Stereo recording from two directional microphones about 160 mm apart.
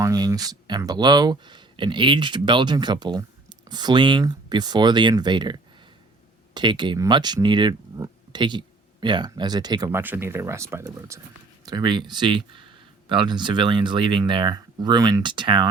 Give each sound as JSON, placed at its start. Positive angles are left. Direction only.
{"t": 0.0, "sound": "speech", "side_deg": -20}
{"t": 10.0, "sound": "speech", "side_deg": -15}
{"t": 11.6, "sound": "speech", "side_deg": -25}